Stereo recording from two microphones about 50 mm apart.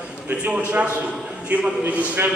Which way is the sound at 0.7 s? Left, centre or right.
Right.